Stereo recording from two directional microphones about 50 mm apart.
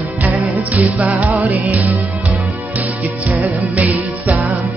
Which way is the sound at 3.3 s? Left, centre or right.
Right.